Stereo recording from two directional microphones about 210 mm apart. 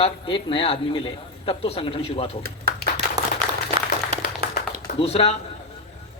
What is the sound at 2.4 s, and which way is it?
Speech, 45° right (ahead or behind).